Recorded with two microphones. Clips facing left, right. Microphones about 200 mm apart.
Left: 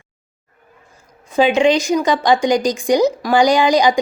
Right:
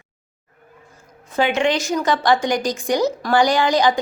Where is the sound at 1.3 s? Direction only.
15° left (ahead or behind).